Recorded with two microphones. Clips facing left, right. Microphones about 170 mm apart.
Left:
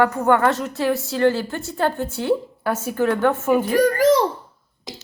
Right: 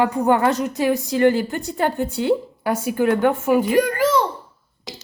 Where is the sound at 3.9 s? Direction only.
40° left (ahead or behind).